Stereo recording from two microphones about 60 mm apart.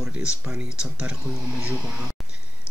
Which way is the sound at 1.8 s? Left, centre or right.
Centre.